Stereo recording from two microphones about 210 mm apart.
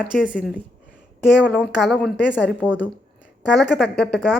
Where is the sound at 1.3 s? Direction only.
5° right (ahead or behind).